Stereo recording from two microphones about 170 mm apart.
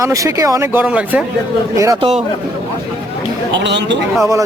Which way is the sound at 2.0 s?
35° right (ahead or behind).